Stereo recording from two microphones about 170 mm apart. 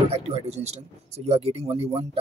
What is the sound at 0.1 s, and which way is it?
Speech, 40° right (ahead or behind).